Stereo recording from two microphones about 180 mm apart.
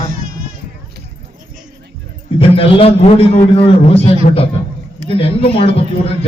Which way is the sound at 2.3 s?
30° left (ahead or behind).